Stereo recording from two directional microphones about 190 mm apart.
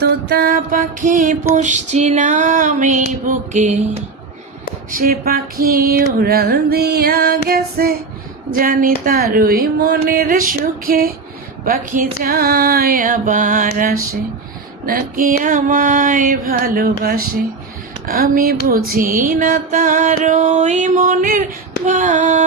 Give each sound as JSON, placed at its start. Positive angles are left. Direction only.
{"t": 0.0, "sound": "music", "side_deg": -55}
{"t": 4.9, "sound": "female singing", "side_deg": -50}
{"t": 21.8, "sound": "music", "side_deg": -40}